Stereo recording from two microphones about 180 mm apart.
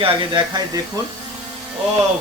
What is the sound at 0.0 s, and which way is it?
Speech, 25° right (ahead or behind).